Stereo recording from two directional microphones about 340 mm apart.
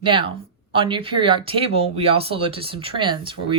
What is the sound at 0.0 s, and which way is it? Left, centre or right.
Speech, centre.